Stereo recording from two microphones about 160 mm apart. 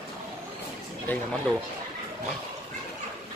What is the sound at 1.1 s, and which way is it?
Speech, 10° left (ahead or behind).